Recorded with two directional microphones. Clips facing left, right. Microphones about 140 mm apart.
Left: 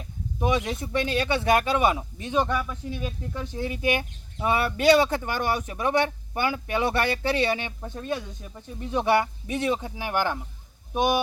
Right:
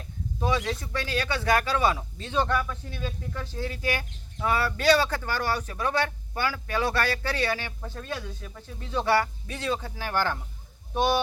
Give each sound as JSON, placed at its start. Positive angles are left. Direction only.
{"t": 0.3, "sound": "speech", "side_deg": 20}